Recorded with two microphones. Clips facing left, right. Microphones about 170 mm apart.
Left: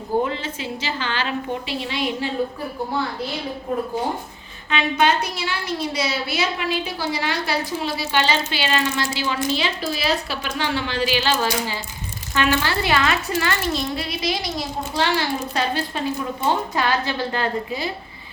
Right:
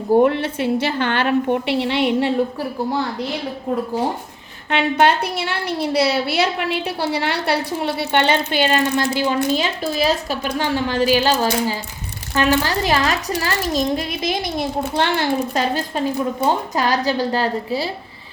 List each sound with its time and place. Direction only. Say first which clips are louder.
0.2 s a woman's voice: right 8 dB; 65° right (ahead or behind)
4.7 s a woman's voice: right 3 dB; 65° right (ahead or behind); by 17.9 s 35° right (ahead or behind)